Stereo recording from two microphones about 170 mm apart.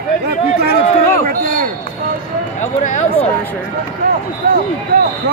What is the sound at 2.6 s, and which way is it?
Speech, 45° left (ahead or behind).